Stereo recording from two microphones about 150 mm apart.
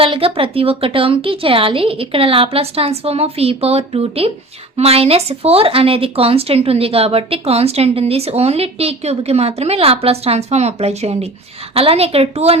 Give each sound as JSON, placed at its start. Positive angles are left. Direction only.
{"t": 0.0, "sound": "speech", "side_deg": -40}